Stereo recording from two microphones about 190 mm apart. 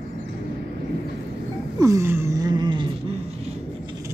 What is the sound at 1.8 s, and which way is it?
Wail, 15° right (ahead or behind).